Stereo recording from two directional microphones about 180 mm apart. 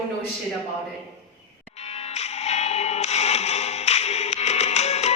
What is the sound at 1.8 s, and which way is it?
Music, 35° left (ahead or behind).